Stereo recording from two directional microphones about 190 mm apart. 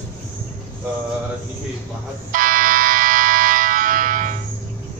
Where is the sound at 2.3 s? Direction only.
45° right (ahead or behind).